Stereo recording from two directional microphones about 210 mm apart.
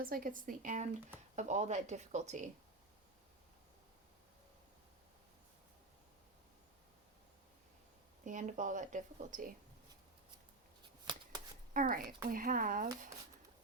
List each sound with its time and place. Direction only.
0.0 s speech: 40° right (ahead or behind)
8.2 s speech: 35° right (ahead or behind)
11.1 s shuffling cards: 20° right (ahead or behind)
11.7 s speech: 40° right (ahead or behind)